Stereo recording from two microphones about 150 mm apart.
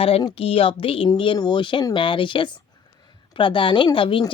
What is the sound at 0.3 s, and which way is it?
Speech, 40° left (ahead or behind).